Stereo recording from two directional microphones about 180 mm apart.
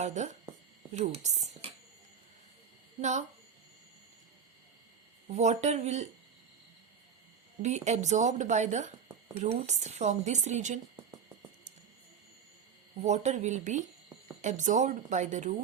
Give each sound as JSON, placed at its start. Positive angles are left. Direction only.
{"t": 0.0, "sound": "speech", "side_deg": -40}
{"t": 3.0, "sound": "a woman's voice", "side_deg": -40}
{"t": 5.3, "sound": "a woman's voice", "side_deg": -40}
{"t": 7.6, "sound": "a woman's voice", "side_deg": -40}
{"t": 13.0, "sound": "a woman's voice", "side_deg": -40}